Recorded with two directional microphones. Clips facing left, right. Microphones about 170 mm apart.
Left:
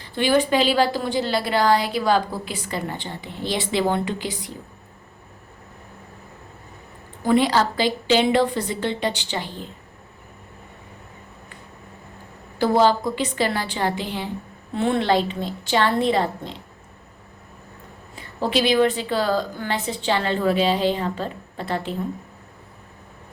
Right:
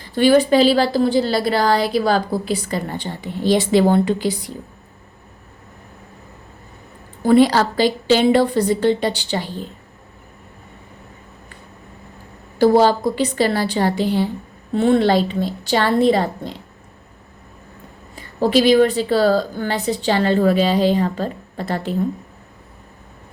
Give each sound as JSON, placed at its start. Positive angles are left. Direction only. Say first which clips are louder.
{"t": 0.2, "sound": "a woman's voice", "louder": "right 6 dB", "side_deg": -40}
{"t": 7.3, "sound": "a woman's voice", "louder": "right 5 dB", "side_deg": -40}
{"t": 12.5, "sound": "a woman's voice", "louder": "right 5 dB", "side_deg": -40}
{"t": 18.3, "sound": "a woman's voice", "louder": "right 6 dB", "side_deg": -40}